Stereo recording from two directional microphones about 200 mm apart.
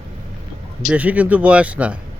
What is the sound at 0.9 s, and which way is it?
Speech, 5° right (ahead or behind).